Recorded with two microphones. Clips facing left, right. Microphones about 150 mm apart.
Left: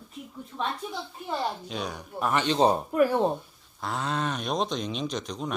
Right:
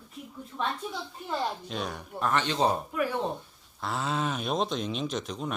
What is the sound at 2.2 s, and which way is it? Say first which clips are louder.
Speech: left 3 dB; 10° left (ahead or behind).